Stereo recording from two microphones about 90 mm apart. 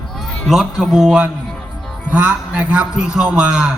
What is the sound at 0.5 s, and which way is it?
A man's voice, 5° right (ahead or behind).